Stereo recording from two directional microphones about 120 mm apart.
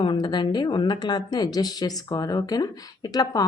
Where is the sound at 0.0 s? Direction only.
40° left (ahead or behind).